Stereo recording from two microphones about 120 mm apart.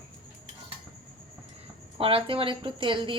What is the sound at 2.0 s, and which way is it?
A woman's voice, 50° right (ahead or behind).